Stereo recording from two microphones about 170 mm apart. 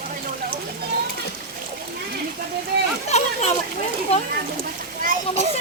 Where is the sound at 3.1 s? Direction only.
40° left (ahead or behind).